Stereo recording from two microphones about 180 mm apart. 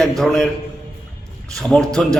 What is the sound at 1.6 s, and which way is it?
Speech, centre (ahead or behind).